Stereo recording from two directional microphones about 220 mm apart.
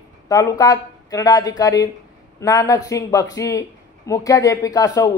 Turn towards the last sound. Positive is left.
turn(degrees=15)  # may be behind; listen again after turning